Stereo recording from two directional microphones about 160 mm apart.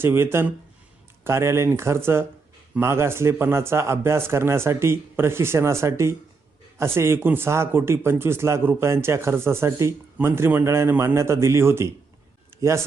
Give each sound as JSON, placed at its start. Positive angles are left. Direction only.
{"t": 0.0, "sound": "a man's voice", "side_deg": -15}